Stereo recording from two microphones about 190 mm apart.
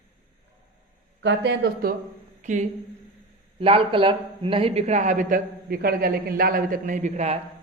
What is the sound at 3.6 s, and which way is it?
Speech, 30° right (ahead or behind).